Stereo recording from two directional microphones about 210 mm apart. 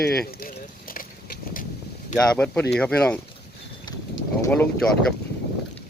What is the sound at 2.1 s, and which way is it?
Speech, 5° left (ahead or behind).